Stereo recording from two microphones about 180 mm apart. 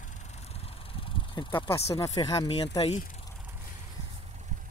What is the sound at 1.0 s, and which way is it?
Speech, 25° left (ahead or behind).